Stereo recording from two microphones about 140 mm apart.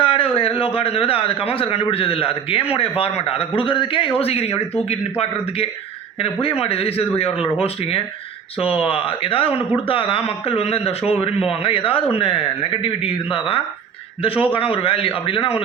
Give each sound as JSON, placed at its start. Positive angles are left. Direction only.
{"t": 0.0, "sound": "a man's voice", "side_deg": 40}